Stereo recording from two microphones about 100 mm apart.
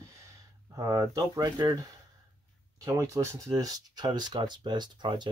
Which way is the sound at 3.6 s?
40° right (ahead or behind).